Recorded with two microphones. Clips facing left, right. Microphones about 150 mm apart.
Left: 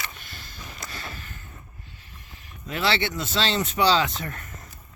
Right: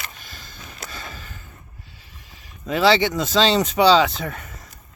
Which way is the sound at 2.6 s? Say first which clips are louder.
Right 8 dB; 90° right.